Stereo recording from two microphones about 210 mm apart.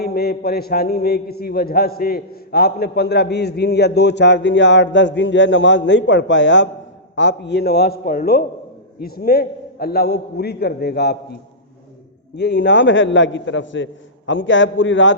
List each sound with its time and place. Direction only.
0.0 s a man's voice: 50° left (ahead or behind)
12.4 s a man's voice: 55° left (ahead or behind)